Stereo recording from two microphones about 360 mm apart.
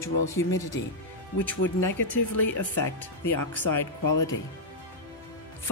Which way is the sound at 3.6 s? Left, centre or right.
Left.